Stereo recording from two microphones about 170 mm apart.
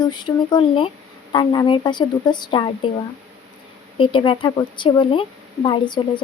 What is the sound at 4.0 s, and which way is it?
Speech, 30° left (ahead or behind).